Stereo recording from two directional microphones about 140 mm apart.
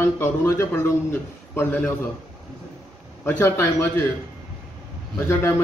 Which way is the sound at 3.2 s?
15° left (ahead or behind).